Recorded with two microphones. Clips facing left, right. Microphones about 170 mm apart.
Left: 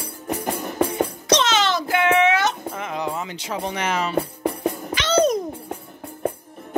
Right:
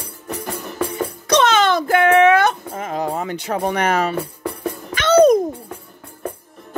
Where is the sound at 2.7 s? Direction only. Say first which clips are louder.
Right 4 dB; 40° right (ahead or behind).